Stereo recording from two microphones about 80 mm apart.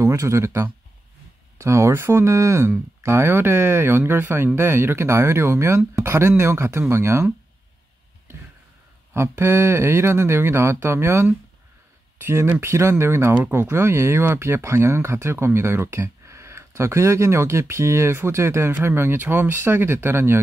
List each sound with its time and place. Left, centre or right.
0.0 s speech: right
9.1 s speech: right